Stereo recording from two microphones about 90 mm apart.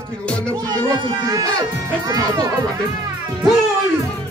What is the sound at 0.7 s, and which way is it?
Speech, 50° right (ahead or behind).